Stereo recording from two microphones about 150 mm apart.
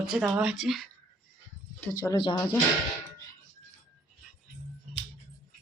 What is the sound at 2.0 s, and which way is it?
Speech, 35° left (ahead or behind).